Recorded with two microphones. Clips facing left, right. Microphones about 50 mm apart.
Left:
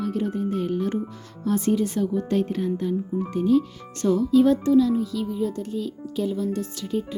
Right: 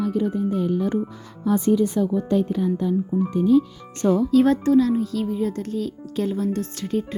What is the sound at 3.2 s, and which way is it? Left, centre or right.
Speech, centre.